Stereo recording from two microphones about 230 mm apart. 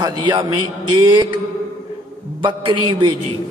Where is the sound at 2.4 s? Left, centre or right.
Right.